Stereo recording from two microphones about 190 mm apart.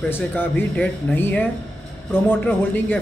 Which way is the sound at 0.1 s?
10° left (ahead or behind).